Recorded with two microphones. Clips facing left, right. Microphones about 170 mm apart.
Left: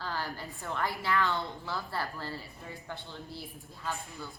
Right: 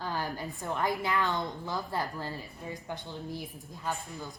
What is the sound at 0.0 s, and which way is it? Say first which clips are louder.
A woman's voice: right 3 dB; 15° right (ahead or behind).